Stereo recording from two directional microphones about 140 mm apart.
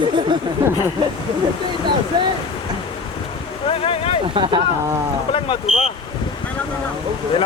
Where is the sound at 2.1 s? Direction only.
30° right (ahead or behind).